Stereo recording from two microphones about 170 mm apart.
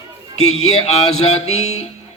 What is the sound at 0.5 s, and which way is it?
Speech, 40° left (ahead or behind).